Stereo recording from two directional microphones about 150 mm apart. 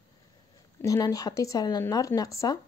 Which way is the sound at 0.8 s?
25° left (ahead or behind).